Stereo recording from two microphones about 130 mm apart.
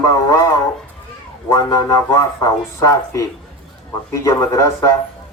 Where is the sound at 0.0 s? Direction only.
25° left (ahead or behind).